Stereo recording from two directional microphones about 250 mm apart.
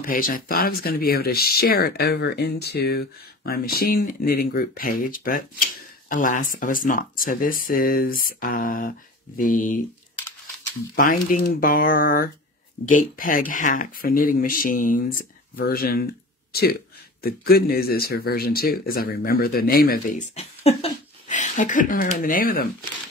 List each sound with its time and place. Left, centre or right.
0.0 s speech: left
11.2 s speech: left
17.2 s speech: left